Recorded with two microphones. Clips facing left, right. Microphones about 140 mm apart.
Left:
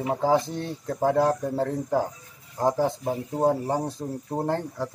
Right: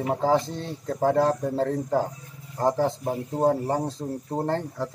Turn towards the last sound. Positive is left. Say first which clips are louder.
# even
turn(degrees=10)  # may be behind; listen again after turning